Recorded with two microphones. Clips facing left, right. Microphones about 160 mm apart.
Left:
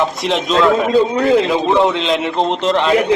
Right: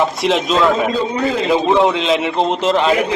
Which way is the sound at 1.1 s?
65° left (ahead or behind).